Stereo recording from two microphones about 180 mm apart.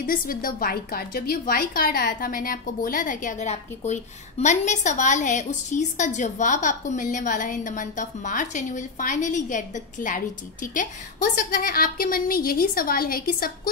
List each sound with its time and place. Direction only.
0.0 s a woman's voice: 55° left (ahead or behind)